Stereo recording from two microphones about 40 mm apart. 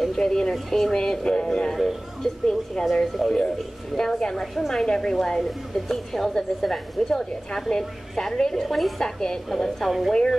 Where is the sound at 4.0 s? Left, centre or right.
Centre.